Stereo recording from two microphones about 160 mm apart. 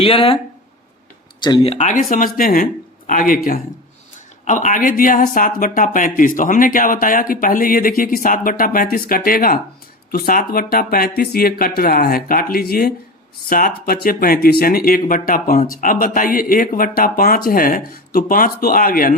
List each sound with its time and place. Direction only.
0.0 s speech: 35° left (ahead or behind)
1.4 s speech: 25° left (ahead or behind)
1.7 s speech: 50° left (ahead or behind)